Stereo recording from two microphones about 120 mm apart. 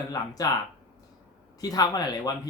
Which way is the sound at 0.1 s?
30° left (ahead or behind).